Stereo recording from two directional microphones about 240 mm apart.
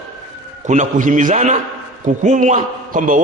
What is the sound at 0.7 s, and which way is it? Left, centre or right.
A man's voice, right.